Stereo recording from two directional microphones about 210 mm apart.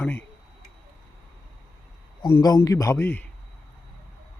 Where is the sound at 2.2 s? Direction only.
15° left (ahead or behind).